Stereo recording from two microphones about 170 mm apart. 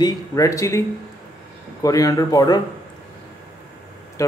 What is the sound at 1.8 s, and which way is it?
Speech, 20° left (ahead or behind).